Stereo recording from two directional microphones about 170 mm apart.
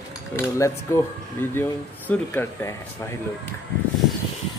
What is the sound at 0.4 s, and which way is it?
Speech, 15° left (ahead or behind).